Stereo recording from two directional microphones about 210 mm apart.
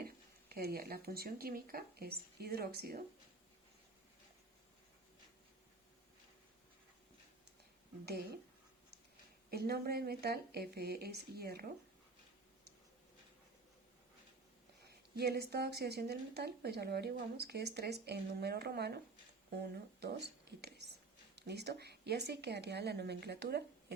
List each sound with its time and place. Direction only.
0.0 s speech: 45° right (ahead or behind)
8.0 s speech: 50° right (ahead or behind)
9.5 s speech: 50° right (ahead or behind)
14.8 s speech: 50° right (ahead or behind)